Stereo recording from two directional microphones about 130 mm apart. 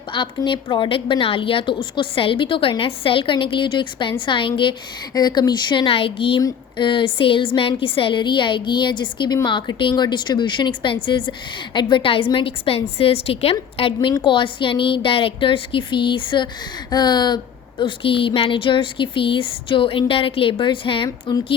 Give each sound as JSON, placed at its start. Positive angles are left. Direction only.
{"t": 0.1, "sound": "a woman's voice", "side_deg": 40}